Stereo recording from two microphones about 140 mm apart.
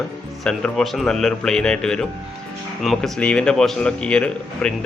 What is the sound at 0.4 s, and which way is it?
A man's voice, 5° left (ahead or behind).